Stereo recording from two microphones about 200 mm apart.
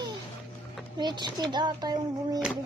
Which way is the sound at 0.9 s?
20° right (ahead or behind).